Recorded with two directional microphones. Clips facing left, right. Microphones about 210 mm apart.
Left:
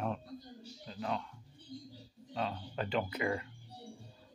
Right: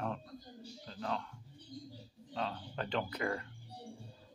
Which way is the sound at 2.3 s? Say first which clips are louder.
Left 2 dB; 10° left (ahead or behind).